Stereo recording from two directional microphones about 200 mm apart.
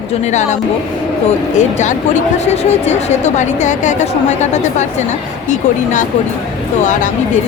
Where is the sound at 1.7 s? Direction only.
35° left (ahead or behind).